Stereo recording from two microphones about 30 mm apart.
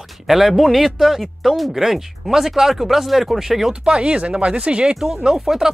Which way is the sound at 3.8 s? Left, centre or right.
Right.